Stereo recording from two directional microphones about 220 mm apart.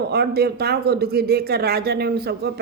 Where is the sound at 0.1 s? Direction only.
45° right (ahead or behind).